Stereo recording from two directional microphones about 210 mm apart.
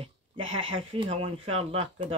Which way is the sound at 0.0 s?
25° right (ahead or behind).